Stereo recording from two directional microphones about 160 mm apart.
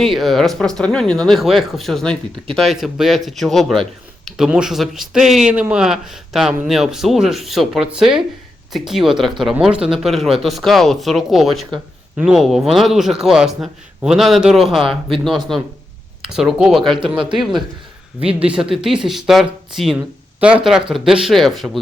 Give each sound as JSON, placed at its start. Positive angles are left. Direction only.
{"t": 0.0, "sound": "speech", "side_deg": 0}
{"t": 16.8, "sound": "speech", "side_deg": -30}
{"t": 17.3, "sound": "speech", "side_deg": 0}